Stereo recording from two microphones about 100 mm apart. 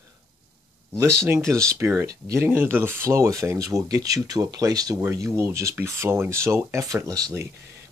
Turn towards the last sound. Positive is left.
turn(degrees=-25)  # may be behind; listen again after turning